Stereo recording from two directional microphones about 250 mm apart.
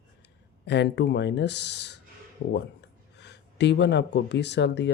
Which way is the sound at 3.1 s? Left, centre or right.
Left.